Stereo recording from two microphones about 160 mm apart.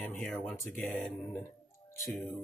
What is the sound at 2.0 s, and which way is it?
Mantra, centre (ahead or behind).